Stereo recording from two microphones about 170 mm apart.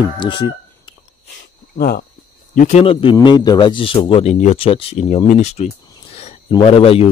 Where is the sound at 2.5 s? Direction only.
45° left (ahead or behind).